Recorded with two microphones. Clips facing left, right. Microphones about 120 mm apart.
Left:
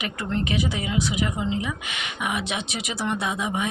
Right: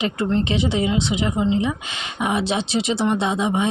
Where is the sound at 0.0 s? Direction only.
25° right (ahead or behind).